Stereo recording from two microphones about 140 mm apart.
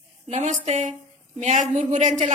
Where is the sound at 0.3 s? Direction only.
55° right (ahead or behind).